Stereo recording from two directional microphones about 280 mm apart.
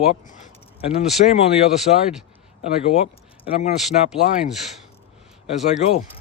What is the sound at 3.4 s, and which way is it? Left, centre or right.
Speech, left.